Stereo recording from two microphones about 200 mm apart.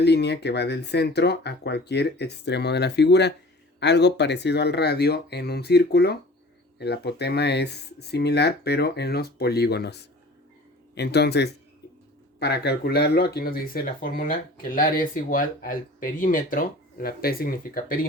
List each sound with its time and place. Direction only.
0.0 s speech: 55° left (ahead or behind)